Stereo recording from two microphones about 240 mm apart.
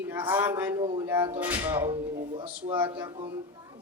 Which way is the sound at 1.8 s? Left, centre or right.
Right.